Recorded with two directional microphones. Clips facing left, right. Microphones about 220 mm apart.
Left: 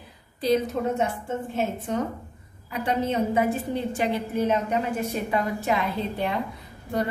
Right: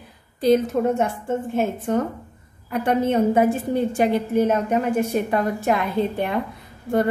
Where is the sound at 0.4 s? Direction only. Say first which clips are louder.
Right 5 dB; 50° right (ahead or behind).